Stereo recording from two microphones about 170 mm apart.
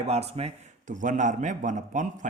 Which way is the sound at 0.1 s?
40° right (ahead or behind).